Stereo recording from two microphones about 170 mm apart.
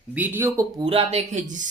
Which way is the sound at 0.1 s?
10° right (ahead or behind).